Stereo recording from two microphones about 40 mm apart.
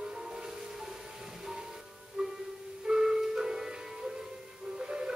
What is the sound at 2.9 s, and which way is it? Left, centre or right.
Music, centre.